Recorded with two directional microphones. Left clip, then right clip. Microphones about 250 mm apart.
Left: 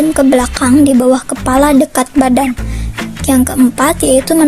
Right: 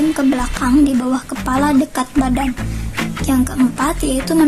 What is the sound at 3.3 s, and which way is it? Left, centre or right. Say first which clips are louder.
A woman's voice: left 7 dB; left.